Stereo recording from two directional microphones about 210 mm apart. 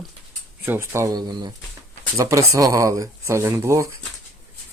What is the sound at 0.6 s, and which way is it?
Speech, 10° right (ahead or behind).